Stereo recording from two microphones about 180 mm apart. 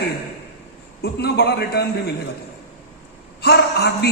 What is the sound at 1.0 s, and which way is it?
Speech, 65° left (ahead or behind).